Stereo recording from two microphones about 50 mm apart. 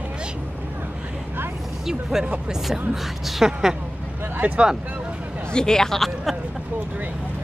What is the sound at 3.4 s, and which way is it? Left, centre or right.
Speech, centre.